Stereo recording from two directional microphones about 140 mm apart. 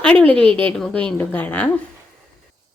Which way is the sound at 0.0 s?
10° left (ahead or behind).